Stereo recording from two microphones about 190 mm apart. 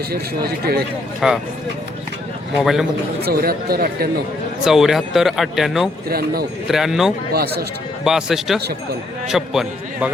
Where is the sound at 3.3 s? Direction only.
55° right (ahead or behind).